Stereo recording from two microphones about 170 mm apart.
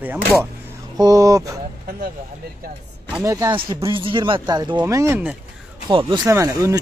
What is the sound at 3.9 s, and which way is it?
Speech, 30° right (ahead or behind).